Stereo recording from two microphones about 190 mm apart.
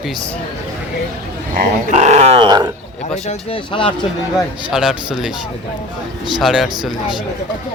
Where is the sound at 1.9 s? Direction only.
35° right (ahead or behind).